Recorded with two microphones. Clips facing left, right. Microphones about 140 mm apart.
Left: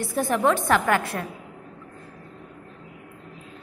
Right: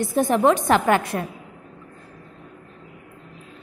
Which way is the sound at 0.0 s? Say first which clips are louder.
Right 4 dB; 20° right (ahead or behind).